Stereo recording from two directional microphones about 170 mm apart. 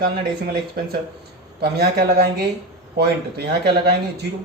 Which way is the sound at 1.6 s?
65° right (ahead or behind).